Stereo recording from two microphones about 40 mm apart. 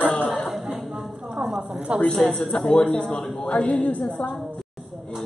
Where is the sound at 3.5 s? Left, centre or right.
Left.